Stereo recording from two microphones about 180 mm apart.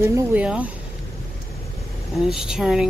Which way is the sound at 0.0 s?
10° right (ahead or behind).